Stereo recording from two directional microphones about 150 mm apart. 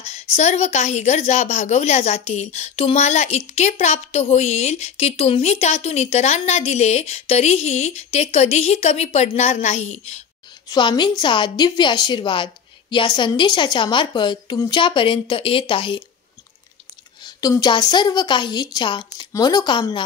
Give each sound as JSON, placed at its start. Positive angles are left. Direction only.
{"t": 0.0, "sound": "a woman's voice", "side_deg": 45}
{"t": 10.7, "sound": "a woman's voice", "side_deg": 30}
{"t": 17.2, "sound": "a woman's voice", "side_deg": 25}